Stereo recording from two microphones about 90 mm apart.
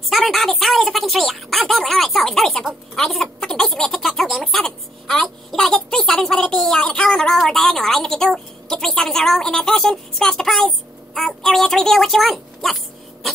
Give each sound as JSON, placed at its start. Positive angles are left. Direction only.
{"t": 0.1, "sound": "speech", "side_deg": 0}